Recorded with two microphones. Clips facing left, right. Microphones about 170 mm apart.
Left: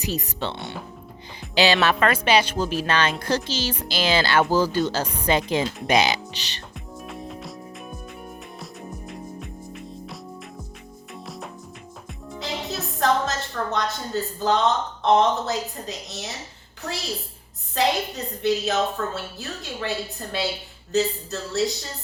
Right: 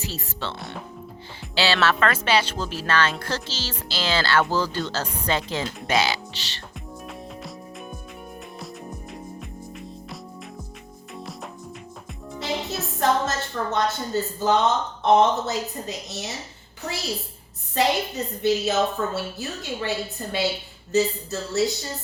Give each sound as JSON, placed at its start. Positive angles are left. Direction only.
{"t": 0.0, "sound": "speech", "side_deg": 15}
{"t": 0.5, "sound": "a woman's voice", "side_deg": 0}
{"t": 1.4, "sound": "speech", "side_deg": 15}
{"t": 6.7, "sound": "music", "side_deg": 0}
{"t": 11.1, "sound": "music", "side_deg": 0}
{"t": 13.7, "sound": "a woman's voice", "side_deg": 0}
{"t": 17.7, "sound": "a woman's voice", "side_deg": 0}